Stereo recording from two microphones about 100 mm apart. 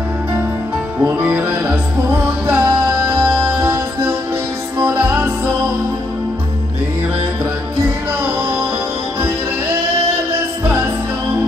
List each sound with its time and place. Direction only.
1.1 s music: 15° right (ahead or behind)